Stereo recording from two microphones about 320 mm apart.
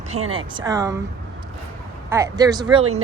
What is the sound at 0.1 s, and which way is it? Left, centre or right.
Speech, right.